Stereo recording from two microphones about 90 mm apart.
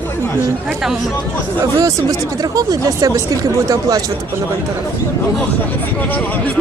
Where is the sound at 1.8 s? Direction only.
40° right (ahead or behind).